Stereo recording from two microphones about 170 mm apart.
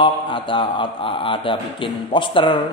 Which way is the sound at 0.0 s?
30° left (ahead or behind).